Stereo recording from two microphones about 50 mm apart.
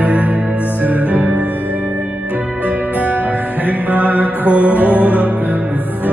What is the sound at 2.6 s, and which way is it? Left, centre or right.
Music, right.